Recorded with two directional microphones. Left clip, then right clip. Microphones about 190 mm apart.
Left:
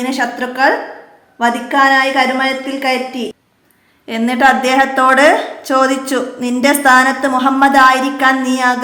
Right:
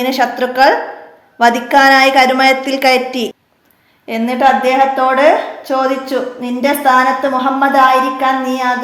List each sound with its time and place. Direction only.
0.0 s a woman's voice: 10° right (ahead or behind); by 3.2 s 25° right (ahead or behind)
4.0 s a woman's voice: 5° left (ahead or behind)
4.4 s a woman's voice: 20° left (ahead or behind)